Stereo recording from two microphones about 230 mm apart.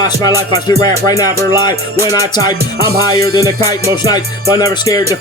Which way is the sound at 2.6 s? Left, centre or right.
Right.